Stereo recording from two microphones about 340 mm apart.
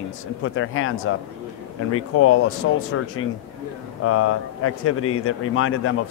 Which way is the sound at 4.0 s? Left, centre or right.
Left.